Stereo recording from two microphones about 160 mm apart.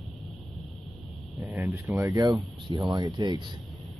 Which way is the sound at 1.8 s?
20° right (ahead or behind).